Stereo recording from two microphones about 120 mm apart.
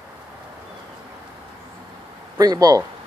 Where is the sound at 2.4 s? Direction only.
30° right (ahead or behind).